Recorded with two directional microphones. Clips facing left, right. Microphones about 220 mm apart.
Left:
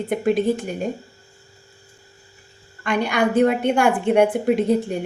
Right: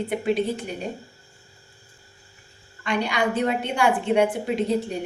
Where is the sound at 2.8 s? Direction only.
50° left (ahead or behind).